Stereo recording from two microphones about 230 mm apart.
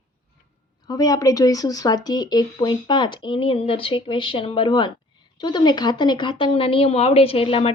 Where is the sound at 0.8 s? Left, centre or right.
Centre.